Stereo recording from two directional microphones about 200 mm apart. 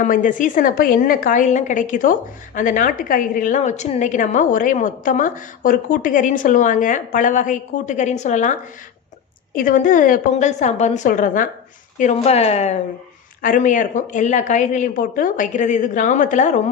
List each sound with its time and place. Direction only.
0.0 s a woman's voice: 40° left (ahead or behind)